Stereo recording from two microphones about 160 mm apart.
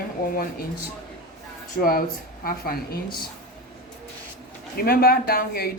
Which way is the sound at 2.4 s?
65° left (ahead or behind).